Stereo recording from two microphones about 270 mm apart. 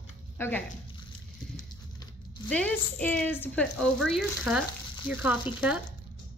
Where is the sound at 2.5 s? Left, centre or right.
Centre.